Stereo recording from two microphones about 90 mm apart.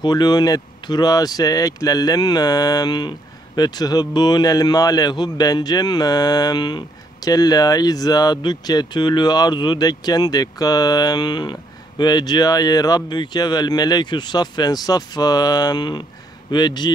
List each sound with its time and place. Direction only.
0.0 s speech: 50° left (ahead or behind)